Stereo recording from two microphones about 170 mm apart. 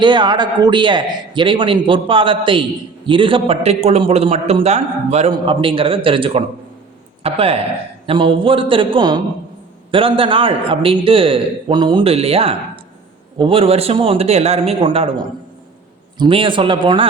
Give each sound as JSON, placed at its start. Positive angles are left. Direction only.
{"t": 0.0, "sound": "a man's voice", "side_deg": -25}